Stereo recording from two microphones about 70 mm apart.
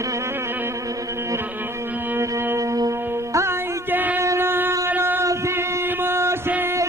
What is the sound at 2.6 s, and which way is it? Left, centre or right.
Music, right.